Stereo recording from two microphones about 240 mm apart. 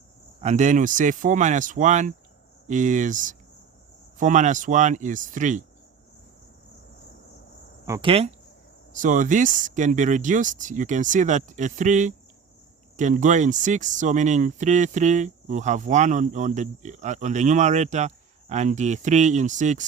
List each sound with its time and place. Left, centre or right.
0.4 s speech: right
7.9 s speech: centre
8.9 s speech: right